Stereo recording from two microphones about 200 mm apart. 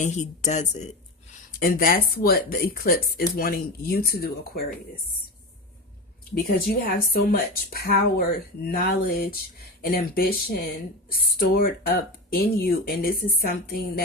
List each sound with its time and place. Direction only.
0.0 s speech: 35° left (ahead or behind)
1.5 s speech: 45° left (ahead or behind)
6.3 s speech: 45° left (ahead or behind)